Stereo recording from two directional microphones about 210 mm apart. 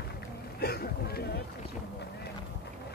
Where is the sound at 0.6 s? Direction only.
50° left (ahead or behind).